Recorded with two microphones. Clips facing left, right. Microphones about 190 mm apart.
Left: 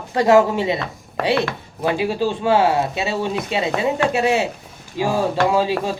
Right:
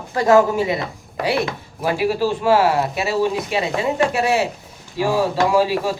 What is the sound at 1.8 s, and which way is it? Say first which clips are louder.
Speech: right 1 dB; 25° left (ahead or behind).